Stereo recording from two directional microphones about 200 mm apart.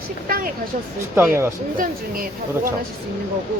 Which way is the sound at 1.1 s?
10° right (ahead or behind).